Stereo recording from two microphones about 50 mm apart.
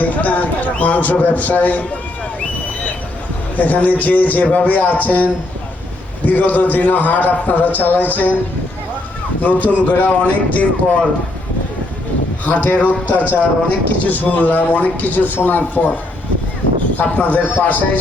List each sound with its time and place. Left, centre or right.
0.0 s a man's voice: left
3.6 s speech: left
6.2 s speech: left
9.4 s speech: left
12.5 s speech: left
17.0 s speech: left